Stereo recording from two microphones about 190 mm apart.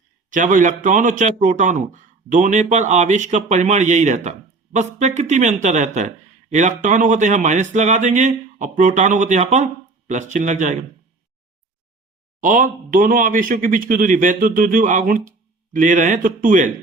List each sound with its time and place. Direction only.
0.3 s a man's voice: 45° right (ahead or behind)
12.4 s a man's voice: 45° right (ahead or behind)